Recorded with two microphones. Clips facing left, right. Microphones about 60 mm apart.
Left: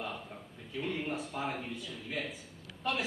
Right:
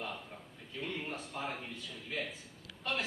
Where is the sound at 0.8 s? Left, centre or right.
Centre.